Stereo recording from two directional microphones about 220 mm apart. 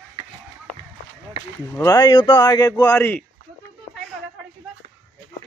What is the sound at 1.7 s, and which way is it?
A man's voice, 15° left (ahead or behind).